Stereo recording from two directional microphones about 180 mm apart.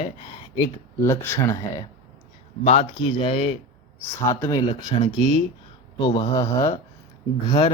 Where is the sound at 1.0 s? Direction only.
15° left (ahead or behind).